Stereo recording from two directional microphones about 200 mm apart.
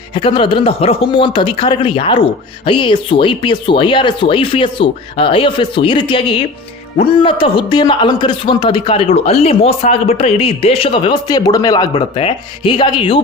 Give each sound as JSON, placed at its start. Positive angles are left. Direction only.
{"t": 0.1, "sound": "speech", "side_deg": 25}